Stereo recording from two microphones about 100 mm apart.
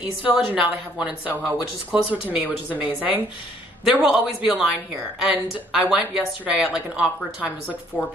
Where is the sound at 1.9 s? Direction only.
15° right (ahead or behind).